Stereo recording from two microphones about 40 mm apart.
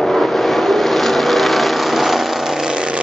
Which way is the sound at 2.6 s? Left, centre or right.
Centre.